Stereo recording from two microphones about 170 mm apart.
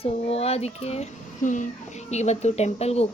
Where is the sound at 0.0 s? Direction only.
35° left (ahead or behind).